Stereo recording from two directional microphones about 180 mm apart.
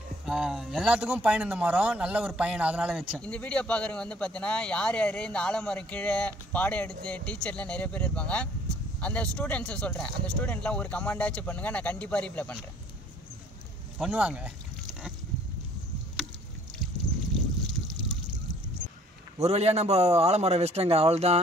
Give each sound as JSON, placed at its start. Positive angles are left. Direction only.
{"t": 0.2, "sound": "speech", "side_deg": -5}
{"t": 13.9, "sound": "speech", "side_deg": -5}
{"t": 19.3, "sound": "a man's voice", "side_deg": -35}